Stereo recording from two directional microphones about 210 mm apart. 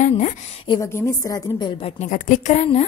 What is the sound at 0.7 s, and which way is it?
A woman's voice, 10° left (ahead or behind).